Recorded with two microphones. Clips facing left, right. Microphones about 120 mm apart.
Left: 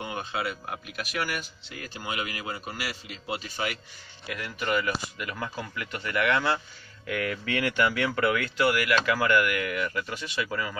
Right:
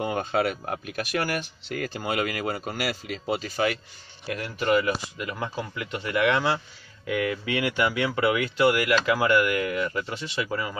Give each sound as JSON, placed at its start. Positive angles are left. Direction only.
{"t": 0.0, "sound": "speech", "side_deg": -45}
{"t": 2.0, "sound": "speech", "side_deg": -60}
{"t": 3.3, "sound": "speech", "side_deg": -40}